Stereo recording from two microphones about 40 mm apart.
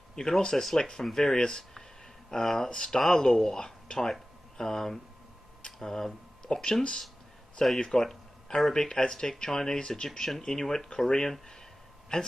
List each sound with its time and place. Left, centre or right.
0.1 s speech: centre
10.0 s speech: centre